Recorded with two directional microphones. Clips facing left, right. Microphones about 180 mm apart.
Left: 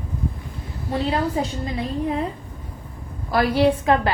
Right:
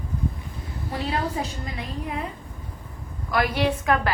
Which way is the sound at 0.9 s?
30° left (ahead or behind).